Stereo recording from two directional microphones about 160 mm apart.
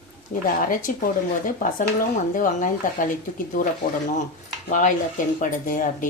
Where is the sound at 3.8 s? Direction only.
70° left (ahead or behind).